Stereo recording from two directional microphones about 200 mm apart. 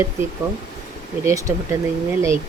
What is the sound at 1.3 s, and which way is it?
Speech, 15° right (ahead or behind).